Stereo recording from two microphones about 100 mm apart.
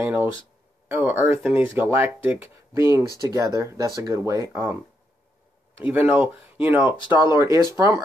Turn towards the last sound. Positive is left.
turn(degrees=-30)  # may be behind; listen again after turning